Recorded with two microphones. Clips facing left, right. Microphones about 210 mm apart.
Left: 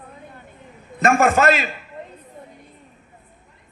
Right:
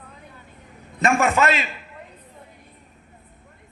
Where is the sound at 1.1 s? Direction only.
50° left (ahead or behind).